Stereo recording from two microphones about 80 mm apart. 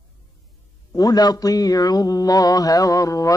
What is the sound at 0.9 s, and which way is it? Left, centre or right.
Mantra, left.